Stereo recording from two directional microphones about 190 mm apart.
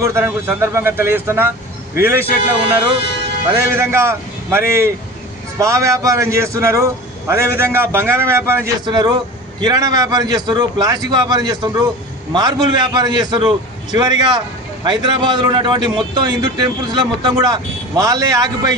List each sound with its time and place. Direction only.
0.0 s a man's voice: 15° right (ahead or behind)
3.7 s a man's voice: 15° right (ahead or behind)